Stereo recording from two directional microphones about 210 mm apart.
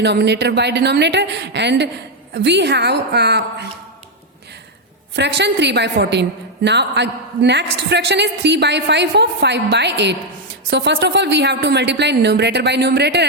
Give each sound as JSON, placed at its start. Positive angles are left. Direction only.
{"t": 0.0, "sound": "a woman's voice", "side_deg": -55}
{"t": 5.1, "sound": "a woman's voice", "side_deg": -55}